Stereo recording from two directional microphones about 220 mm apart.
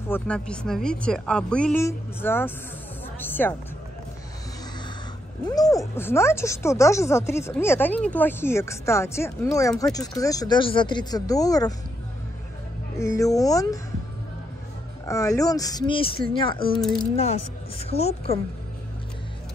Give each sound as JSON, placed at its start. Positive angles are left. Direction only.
{"t": 0.1, "sound": "speech", "side_deg": 5}
{"t": 5.5, "sound": "speech", "side_deg": 15}
{"t": 12.9, "sound": "speech", "side_deg": 15}
{"t": 15.0, "sound": "a woman's voice", "side_deg": 15}